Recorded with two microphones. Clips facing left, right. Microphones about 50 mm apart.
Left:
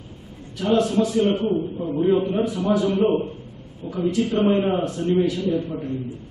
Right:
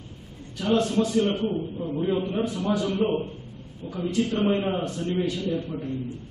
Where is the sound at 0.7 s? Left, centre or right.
Centre.